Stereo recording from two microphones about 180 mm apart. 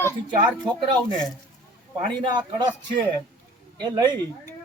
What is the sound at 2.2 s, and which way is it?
Speech, 25° right (ahead or behind).